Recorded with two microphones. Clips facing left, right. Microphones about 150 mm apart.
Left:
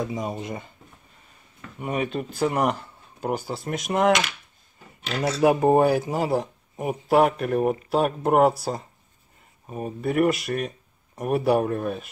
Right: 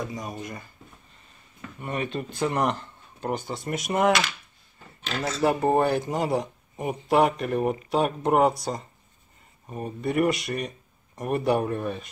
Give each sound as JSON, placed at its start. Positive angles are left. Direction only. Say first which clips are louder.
{"t": 0.1, "sound": "speech", "louder": "left 5 dB", "side_deg": 25}
{"t": 1.8, "sound": "speech", "louder": "left 3 dB", "side_deg": 10}